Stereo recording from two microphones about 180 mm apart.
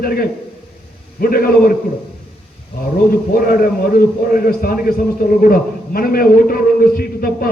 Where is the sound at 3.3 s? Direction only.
55° left (ahead or behind).